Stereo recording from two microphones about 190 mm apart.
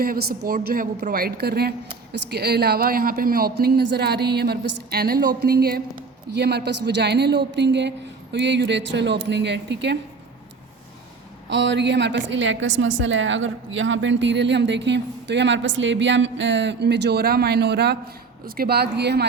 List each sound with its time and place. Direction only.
0.0 s a woman's voice: 50° right (ahead or behind)
11.4 s a woman's voice: 70° right (ahead or behind)